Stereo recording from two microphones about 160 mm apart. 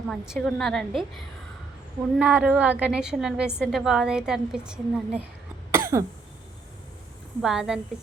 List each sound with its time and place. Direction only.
0.1 s a woman's voice: centre (ahead or behind)
5.7 s cough: 20° right (ahead or behind)
7.4 s a woman's voice: centre (ahead or behind)